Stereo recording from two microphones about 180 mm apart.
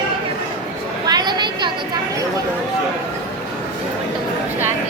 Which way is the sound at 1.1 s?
25° right (ahead or behind).